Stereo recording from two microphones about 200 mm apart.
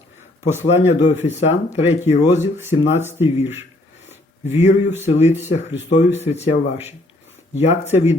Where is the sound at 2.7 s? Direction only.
30° left (ahead or behind).